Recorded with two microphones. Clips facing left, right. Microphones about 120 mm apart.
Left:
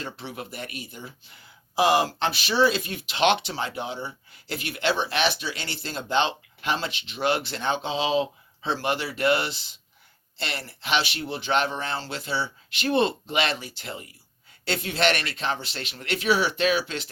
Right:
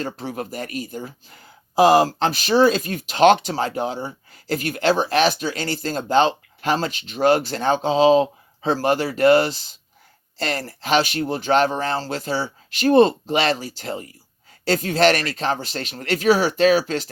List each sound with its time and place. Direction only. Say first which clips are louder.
0.0 s speech: right 7 dB; 40° right (ahead or behind)